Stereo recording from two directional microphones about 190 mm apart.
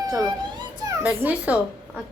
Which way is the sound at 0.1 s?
15° right (ahead or behind).